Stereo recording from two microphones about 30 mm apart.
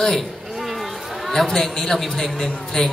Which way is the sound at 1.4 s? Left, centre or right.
Centre.